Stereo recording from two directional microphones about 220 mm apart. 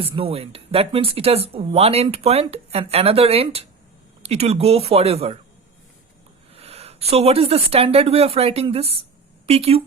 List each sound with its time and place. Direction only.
0.0 s speech: 25° right (ahead or behind)
6.5 s a woman's voice: 25° right (ahead or behind)